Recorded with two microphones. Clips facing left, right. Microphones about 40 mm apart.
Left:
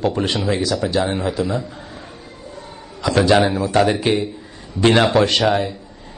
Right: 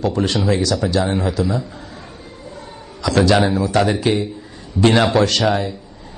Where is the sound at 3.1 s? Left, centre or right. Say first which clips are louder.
Even; centre.